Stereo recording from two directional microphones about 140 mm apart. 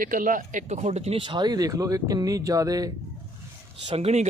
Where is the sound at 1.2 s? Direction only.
35° right (ahead or behind).